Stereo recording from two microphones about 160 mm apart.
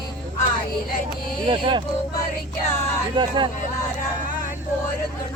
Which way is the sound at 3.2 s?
30° right (ahead or behind).